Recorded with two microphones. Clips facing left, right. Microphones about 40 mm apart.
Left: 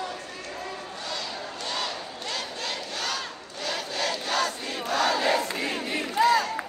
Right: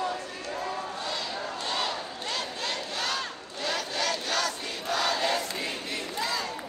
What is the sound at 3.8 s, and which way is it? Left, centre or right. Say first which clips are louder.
Crowd: left 1 dB; left.